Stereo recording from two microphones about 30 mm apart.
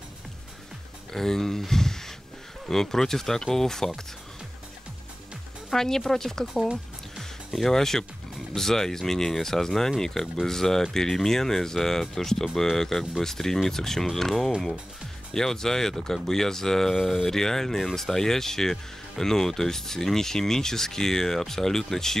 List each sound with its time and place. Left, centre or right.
1.1 s speech: centre
1.6 s a sound: centre
2.7 s speech: centre
5.7 s speech: centre
17.3 s speech: centre